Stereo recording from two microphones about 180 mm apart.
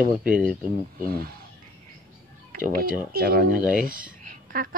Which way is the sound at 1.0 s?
55° right (ahead or behind).